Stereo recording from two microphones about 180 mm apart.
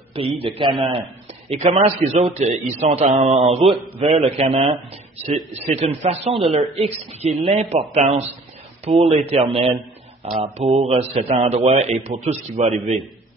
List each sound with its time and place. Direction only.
0.1 s a man's voice: 30° right (ahead or behind)
1.5 s a man's voice: 40° right (ahead or behind)